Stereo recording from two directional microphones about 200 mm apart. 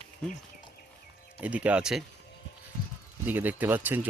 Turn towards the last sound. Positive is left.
turn(degrees=-10)  # may be behind; listen again after turning